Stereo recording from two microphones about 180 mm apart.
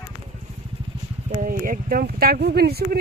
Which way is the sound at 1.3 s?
50° right (ahead or behind).